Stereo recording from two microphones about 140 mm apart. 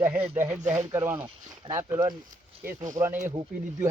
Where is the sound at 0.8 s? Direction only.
25° right (ahead or behind).